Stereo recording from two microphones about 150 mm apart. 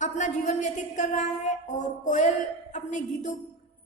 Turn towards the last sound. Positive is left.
turn(degrees=50)  # may be behind; listen again after turning